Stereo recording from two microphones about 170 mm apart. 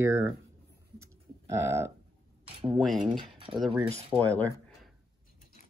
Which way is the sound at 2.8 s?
Centre (ahead or behind).